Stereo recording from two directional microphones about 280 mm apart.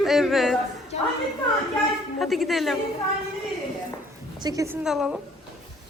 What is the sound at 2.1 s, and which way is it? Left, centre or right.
Speech, centre.